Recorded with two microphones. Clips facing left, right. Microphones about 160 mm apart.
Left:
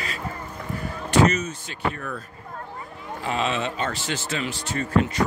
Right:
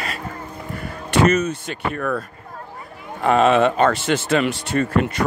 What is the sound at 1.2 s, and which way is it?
Speech, 55° right (ahead or behind).